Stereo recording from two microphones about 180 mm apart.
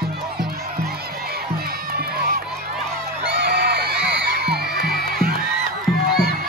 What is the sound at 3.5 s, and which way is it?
Music, 60° right (ahead or behind).